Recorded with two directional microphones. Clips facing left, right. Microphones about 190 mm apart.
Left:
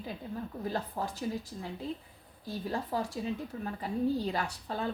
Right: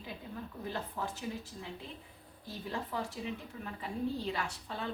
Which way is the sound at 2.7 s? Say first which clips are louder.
Left 4 dB; 35° left (ahead or behind).